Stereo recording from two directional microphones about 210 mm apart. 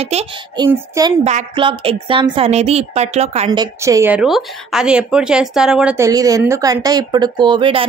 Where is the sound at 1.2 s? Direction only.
30° right (ahead or behind).